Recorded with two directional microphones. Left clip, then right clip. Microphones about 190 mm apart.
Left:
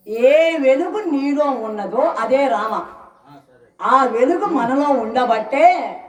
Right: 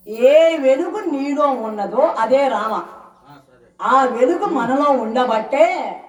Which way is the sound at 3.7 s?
45° left (ahead or behind).